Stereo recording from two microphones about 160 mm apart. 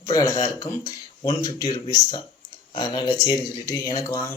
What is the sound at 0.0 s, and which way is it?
Speech, 20° left (ahead or behind).